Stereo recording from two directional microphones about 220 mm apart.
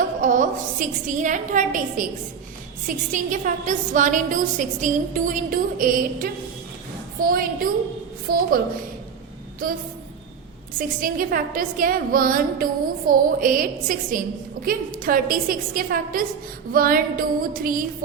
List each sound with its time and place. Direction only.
0.2 s a woman's voice: 35° right (ahead or behind)
10.8 s a woman's voice: 40° right (ahead or behind)